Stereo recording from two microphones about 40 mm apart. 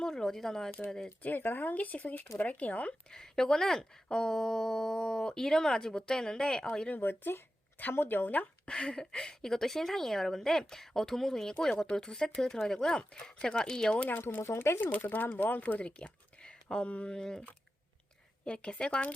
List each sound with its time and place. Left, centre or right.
0.0 s a sound: centre
0.9 s speech: centre
1.2 s speech: left
1.7 s speech: left
3.1 s speech: centre
6.9 s speech: left
7.9 s speech: left
8.6 s speech: left
14.1 s speech: left
14.8 s speech: left
15.6 s speech: left; by 17.4 s centre
18.4 s speech: left